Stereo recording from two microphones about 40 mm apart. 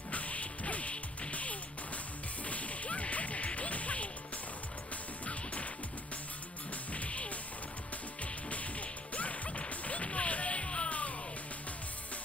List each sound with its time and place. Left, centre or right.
0.1 s music: left
2.4 s whip: left
5.2 s music: left
6.9 s music: left
9.1 s music: left